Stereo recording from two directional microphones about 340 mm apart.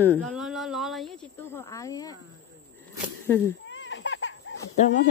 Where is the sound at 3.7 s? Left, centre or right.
Left.